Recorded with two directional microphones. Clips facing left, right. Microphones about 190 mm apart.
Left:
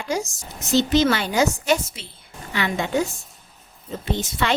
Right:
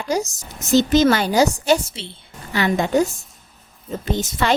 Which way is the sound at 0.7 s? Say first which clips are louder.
Right 4 dB; 45° right (ahead or behind).